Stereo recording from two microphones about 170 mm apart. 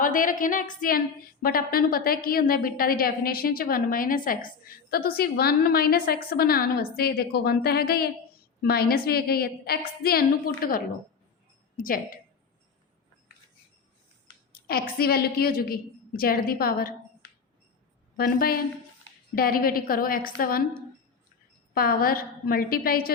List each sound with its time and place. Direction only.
0.0 s a woman's voice: 50° left (ahead or behind)
14.5 s a woman's voice: 60° left (ahead or behind)
18.2 s a woman's voice: 60° left (ahead or behind)
21.8 s a woman's voice: 60° left (ahead or behind)